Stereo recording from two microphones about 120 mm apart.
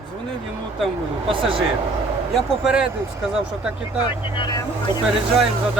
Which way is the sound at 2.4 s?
5° right (ahead or behind).